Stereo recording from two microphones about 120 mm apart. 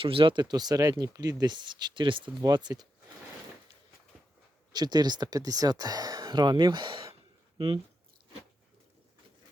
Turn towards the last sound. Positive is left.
turn(degrees=-50)  # may be behind; listen again after turning